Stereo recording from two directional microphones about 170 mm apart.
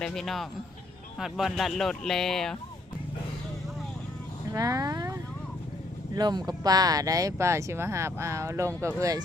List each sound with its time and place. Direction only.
0.0 s speech: 5° left (ahead or behind)
4.5 s vehicle: 20° right (ahead or behind)
6.1 s speech: 25° right (ahead or behind)